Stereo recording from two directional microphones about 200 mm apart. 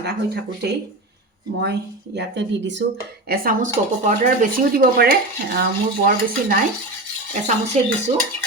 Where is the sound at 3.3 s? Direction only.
40° right (ahead or behind).